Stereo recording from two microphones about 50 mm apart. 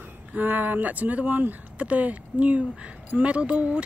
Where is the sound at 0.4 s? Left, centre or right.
Right.